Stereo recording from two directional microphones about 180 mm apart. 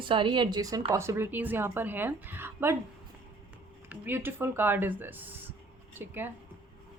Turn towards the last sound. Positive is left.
turn(degrees=-10)  # may be behind; listen again after turning